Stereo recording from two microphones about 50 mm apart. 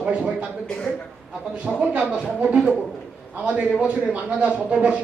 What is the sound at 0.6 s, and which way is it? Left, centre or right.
Speech, centre.